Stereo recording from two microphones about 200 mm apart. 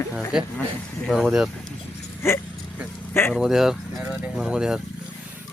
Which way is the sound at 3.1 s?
10° left (ahead or behind).